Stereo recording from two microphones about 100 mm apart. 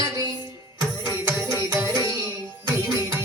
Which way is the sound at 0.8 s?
30° right (ahead or behind).